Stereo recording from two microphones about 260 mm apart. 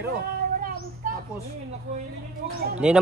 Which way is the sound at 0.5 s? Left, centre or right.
Right.